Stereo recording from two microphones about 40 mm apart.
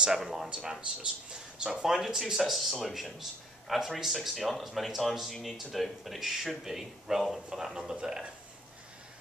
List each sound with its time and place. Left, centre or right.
0.0 s speech: centre
7.4 s speech: centre